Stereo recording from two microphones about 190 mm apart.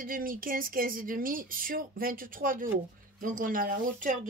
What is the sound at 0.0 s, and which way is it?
Speech, 50° right (ahead or behind).